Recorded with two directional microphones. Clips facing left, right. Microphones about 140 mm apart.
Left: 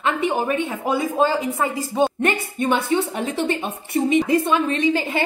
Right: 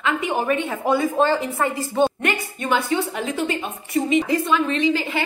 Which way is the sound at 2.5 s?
25° left (ahead or behind).